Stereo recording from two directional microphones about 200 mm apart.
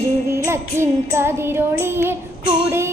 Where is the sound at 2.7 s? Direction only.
15° right (ahead or behind).